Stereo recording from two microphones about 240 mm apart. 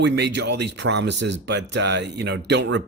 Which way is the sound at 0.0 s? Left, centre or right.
Right.